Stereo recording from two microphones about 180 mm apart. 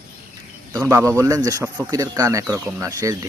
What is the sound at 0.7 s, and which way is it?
Speech, 15° right (ahead or behind).